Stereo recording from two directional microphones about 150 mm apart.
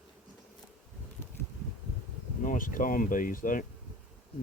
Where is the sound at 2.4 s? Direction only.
65° left (ahead or behind).